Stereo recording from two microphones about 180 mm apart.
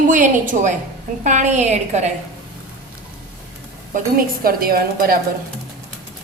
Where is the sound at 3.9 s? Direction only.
55° right (ahead or behind).